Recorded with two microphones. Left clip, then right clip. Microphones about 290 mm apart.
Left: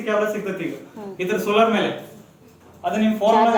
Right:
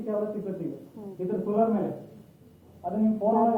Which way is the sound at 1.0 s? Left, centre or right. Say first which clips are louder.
Left 10 dB; left.